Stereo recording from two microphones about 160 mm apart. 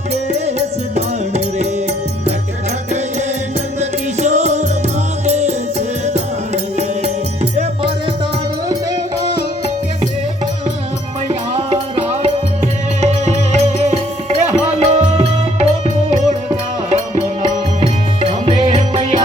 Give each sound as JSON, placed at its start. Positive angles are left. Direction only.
{"t": 0.3, "sound": "music", "side_deg": -45}
{"t": 3.8, "sound": "music", "side_deg": -45}
{"t": 11.5, "sound": "music", "side_deg": -45}
{"t": 16.9, "sound": "music", "side_deg": -45}